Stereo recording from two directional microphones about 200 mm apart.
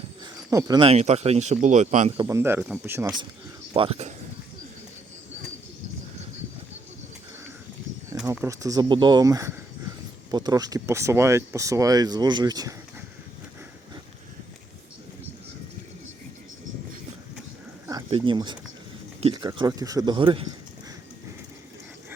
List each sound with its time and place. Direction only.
0.5 s speech: 20° right (ahead or behind)
2.2 s speech: 15° right (ahead or behind)
3.8 s speech: 30° right (ahead or behind)
8.3 s speech: 15° right (ahead or behind)
17.8 s a sound: 20° right (ahead or behind)
19.2 s speech: 20° right (ahead or behind)